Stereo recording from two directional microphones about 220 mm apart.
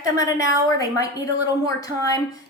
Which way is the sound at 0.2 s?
15° left (ahead or behind).